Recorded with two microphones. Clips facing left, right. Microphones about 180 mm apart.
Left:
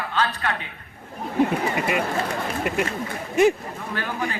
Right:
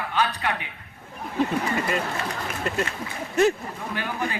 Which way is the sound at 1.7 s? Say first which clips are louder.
Left 3 dB; 15° left (ahead or behind).